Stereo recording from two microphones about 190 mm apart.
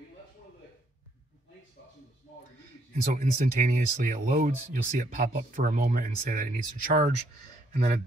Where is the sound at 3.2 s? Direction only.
40° right (ahead or behind).